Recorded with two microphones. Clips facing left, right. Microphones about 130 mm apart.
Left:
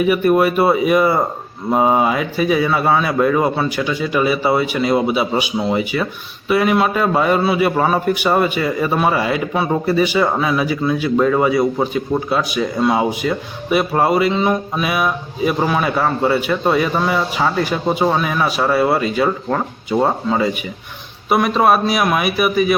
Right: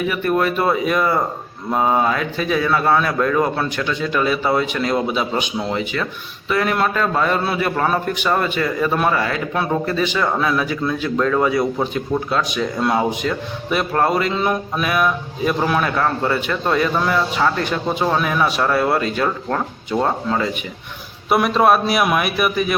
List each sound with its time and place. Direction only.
0.1 s a man's voice: 15° left (ahead or behind)